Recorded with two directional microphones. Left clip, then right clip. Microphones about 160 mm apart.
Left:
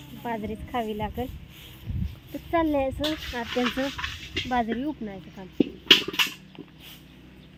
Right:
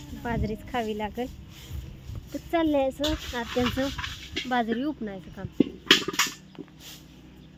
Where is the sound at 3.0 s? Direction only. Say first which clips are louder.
Even; 65° right (ahead or behind).